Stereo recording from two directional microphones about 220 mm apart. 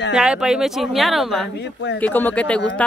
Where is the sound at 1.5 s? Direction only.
50° left (ahead or behind).